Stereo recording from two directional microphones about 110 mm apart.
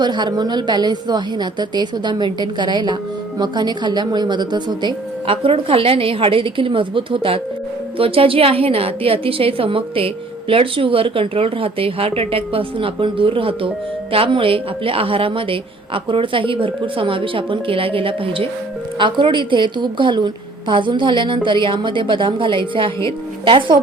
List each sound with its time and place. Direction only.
0.0 s a woman's voice: 45° right (ahead or behind)